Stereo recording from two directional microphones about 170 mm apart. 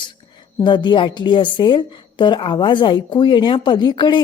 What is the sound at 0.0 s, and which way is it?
A woman's voice, 25° left (ahead or behind).